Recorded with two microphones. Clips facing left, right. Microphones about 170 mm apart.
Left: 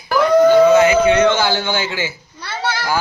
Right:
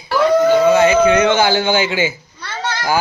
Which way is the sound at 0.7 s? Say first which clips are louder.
Even; 30° right (ahead or behind).